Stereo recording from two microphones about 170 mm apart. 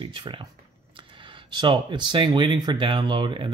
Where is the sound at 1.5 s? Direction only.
25° right (ahead or behind).